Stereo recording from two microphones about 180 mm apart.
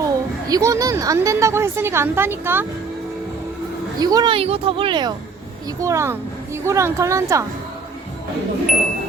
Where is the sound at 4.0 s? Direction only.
20° right (ahead or behind).